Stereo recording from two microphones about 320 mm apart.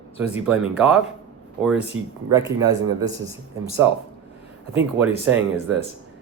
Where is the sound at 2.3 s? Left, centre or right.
Centre.